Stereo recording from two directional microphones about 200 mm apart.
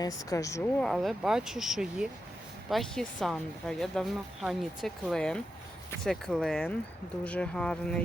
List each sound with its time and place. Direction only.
0.0 s speech: 15° left (ahead or behind)
0.8 s speech: centre (ahead or behind)